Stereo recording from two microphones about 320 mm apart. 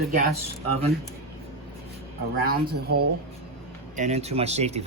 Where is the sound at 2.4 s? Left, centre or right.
Right.